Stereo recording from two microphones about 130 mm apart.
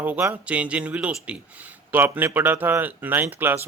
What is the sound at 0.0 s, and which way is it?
Speech, 15° right (ahead or behind).